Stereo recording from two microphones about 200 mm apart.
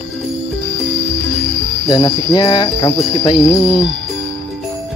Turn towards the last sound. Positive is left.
turn(degrees=20)  # may be behind; listen again after turning